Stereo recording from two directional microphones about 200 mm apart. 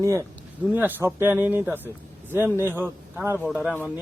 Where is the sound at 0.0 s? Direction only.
15° right (ahead or behind).